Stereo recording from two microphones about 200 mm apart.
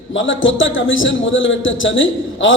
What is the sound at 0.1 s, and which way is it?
A man's voice, 70° left (ahead or behind).